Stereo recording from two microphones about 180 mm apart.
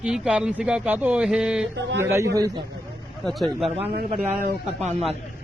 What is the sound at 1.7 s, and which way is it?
Speech, 75° right (ahead or behind).